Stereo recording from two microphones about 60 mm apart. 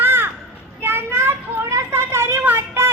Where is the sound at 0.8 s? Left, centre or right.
Right.